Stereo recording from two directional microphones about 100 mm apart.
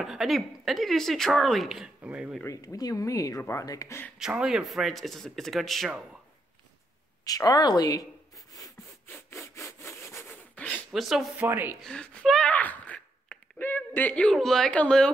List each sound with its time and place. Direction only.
0.0 s speech: 5° right (ahead or behind)
2.0 s speech: 15° right (ahead or behind)
2.4 s speech: 35° left (ahead or behind)
4.2 s speech: 5° right (ahead or behind)
7.2 s speech: 40° left (ahead or behind)
9.0 s sawing: 25° left (ahead or behind)
10.5 s a sound: 15° left (ahead or behind)
10.9 s speech: 5° right (ahead or behind)
11.3 s a woman's voice: 20° right (ahead or behind)
11.8 s speech: 10° left (ahead or behind)
12.5 s a sound: 15° left (ahead or behind)
14.3 s speech: 5° left (ahead or behind)